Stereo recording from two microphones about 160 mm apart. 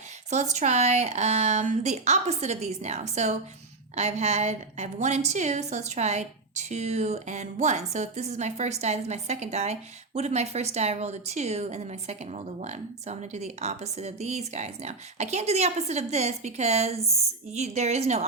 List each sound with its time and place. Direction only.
0.3 s a woman's voice: 45° right (ahead or behind)